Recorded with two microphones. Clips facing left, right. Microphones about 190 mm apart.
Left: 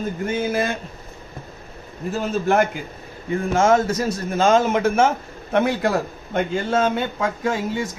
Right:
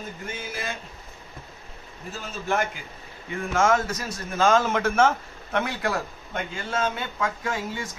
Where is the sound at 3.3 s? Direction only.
30° left (ahead or behind); by 5.6 s 15° left (ahead or behind).